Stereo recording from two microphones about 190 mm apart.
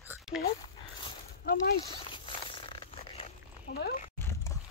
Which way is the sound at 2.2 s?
25° left (ahead or behind).